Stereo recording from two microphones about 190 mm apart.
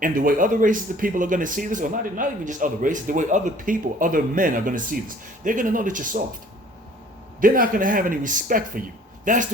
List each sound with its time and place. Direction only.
0.0 s speech: 45° right (ahead or behind)
7.4 s speech: 45° right (ahead or behind)